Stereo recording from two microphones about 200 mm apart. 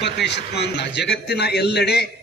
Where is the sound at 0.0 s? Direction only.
60° left (ahead or behind).